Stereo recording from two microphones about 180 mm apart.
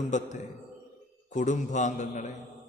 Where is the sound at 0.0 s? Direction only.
40° left (ahead or behind).